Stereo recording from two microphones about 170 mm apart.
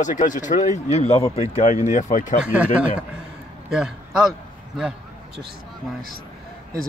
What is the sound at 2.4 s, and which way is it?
A man's voice, 5° right (ahead or behind).